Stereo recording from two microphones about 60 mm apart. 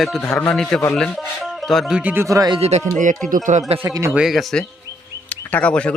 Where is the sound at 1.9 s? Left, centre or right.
Centre.